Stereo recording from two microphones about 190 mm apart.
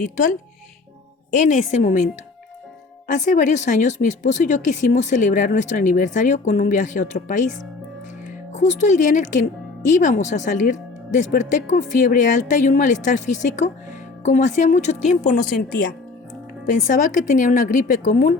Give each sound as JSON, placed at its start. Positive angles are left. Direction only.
{"t": 1.4, "sound": "speech", "side_deg": 40}
{"t": 3.1, "sound": "speech", "side_deg": 40}
{"t": 8.5, "sound": "a woman's voice", "side_deg": 40}